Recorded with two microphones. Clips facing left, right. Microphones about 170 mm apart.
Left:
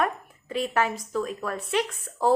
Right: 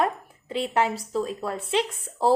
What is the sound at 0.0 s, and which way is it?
A woman's voice, 25° right (ahead or behind).